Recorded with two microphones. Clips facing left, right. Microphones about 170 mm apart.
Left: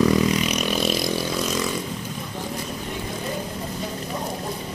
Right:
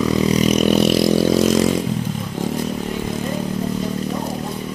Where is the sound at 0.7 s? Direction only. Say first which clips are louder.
Right 9 dB; 65° right (ahead or behind).